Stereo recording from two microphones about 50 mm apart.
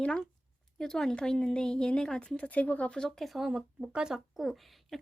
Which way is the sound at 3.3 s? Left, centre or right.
Centre.